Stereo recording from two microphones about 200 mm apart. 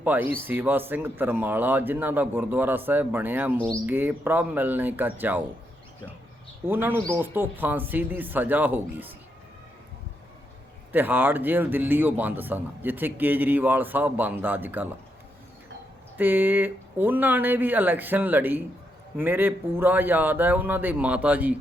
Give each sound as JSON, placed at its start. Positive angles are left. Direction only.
{"t": 0.0, "sound": "a man's voice", "side_deg": -10}
{"t": 6.7, "sound": "a man's voice", "side_deg": -10}
{"t": 10.9, "sound": "a man's voice", "side_deg": -10}
{"t": 16.1, "sound": "a man's voice", "side_deg": -10}